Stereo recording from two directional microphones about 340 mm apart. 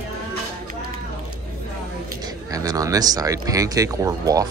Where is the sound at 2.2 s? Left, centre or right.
Centre.